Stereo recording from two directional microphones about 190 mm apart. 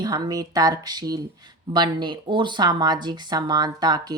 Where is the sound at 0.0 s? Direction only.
20° right (ahead or behind).